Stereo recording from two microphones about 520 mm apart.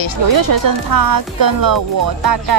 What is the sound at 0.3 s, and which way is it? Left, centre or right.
Speech, right.